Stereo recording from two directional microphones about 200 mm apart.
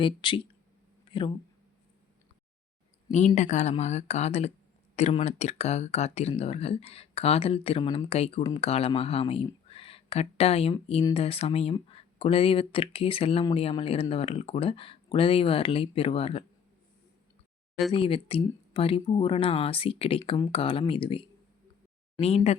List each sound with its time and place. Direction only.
0.0 s speech: 25° left (ahead or behind)
1.0 s a sound: 25° left (ahead or behind)
3.1 s speech: 35° left (ahead or behind)
17.9 s speech: 25° left (ahead or behind)